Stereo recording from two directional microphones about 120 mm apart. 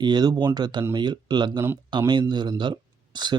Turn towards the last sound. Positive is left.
turn(degrees=-40)  # may be behind; listen again after turning